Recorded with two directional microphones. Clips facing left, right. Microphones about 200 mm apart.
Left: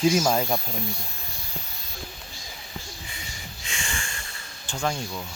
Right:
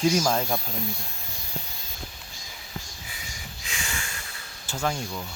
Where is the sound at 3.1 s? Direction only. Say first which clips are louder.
Left 1 dB; 5° right (ahead or behind).